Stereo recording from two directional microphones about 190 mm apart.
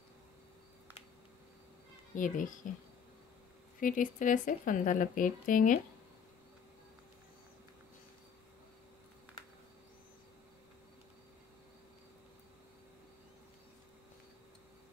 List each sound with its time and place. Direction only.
2.1 s speech: 45° left (ahead or behind)
3.8 s speech: 45° left (ahead or behind)